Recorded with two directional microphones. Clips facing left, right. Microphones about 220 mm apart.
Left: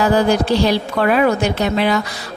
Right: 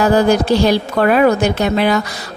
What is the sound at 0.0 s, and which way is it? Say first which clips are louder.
A woman's voice: right 2 dB; 45° right (ahead or behind).